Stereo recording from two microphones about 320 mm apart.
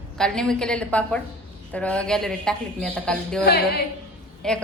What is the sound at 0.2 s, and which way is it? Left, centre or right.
Speech, centre.